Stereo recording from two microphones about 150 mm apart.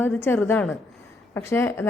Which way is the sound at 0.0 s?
15° left (ahead or behind).